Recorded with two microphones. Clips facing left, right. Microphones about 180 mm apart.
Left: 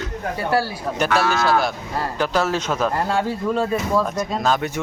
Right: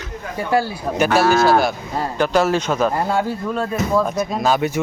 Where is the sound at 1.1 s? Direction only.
30° right (ahead or behind).